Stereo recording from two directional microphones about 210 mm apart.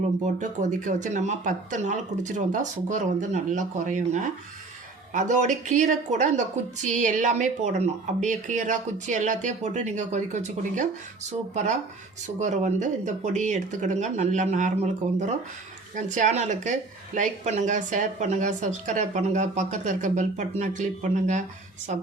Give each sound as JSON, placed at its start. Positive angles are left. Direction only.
{"t": 0.3, "sound": "a woman's voice", "side_deg": -35}
{"t": 16.0, "sound": "a woman's voice", "side_deg": -35}